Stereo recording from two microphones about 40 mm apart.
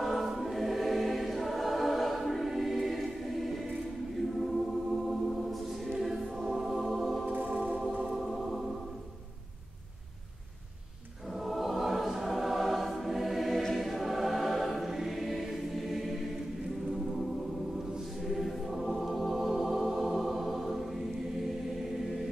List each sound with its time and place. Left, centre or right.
0.0 s choir: centre
7.3 s music: right
8.2 s music: centre
11.3 s choir: centre